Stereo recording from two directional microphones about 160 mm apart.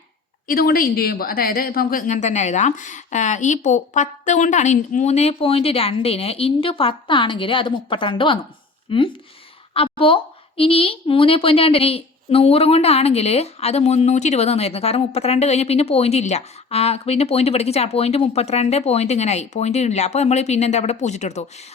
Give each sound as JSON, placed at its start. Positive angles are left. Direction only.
{"t": 0.4, "sound": "a woman's voice", "side_deg": 70}